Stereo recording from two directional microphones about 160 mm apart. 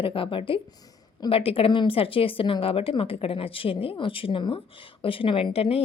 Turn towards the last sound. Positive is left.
turn(degrees=40)  # may be behind; listen again after turning